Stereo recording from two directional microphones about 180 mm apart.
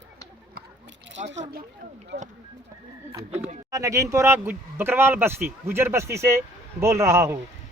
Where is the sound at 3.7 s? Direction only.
15° right (ahead or behind).